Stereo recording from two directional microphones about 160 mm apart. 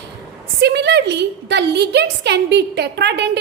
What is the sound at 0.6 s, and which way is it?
A woman's voice, 90° right.